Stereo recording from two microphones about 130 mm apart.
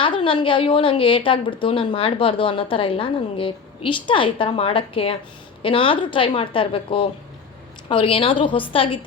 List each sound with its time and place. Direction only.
0.0 s a woman's voice: 40° left (ahead or behind)